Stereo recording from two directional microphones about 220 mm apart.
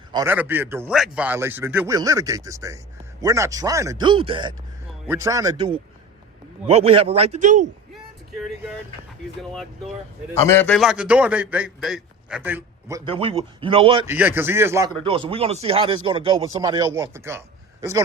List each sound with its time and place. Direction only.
0.1 s a man's voice: 15° right (ahead or behind); by 7.7 s 35° right (ahead or behind)
8.4 s a man's voice: centre (ahead or behind)
13.1 s a man's voice: 25° right (ahead or behind)
14.1 s a man's voice: 10° right (ahead or behind)
15.0 s a man's voice: 25° right (ahead or behind)